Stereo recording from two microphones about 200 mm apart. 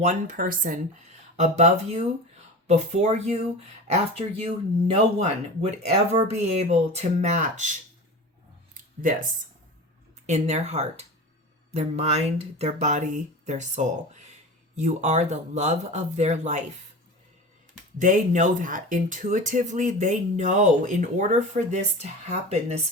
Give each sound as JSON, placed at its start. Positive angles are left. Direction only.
{"t": 0.0, "sound": "speech", "side_deg": -40}
{"t": 8.7, "sound": "a sound", "side_deg": -45}
{"t": 10.2, "sound": "speech", "side_deg": -35}
{"t": 17.9, "sound": "speech", "side_deg": -40}